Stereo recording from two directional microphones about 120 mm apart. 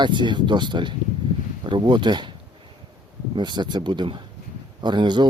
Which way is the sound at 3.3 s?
40° right (ahead or behind).